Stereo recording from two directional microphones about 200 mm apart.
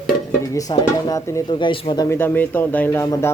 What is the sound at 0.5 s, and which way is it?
Speech, 15° left (ahead or behind).